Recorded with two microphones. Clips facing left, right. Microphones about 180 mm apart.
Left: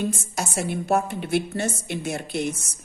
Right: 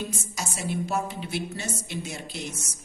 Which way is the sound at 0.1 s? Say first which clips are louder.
Left 6 dB; 55° left (ahead or behind).